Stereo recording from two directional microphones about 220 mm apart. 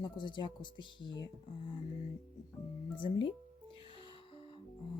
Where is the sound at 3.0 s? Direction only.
20° left (ahead or behind).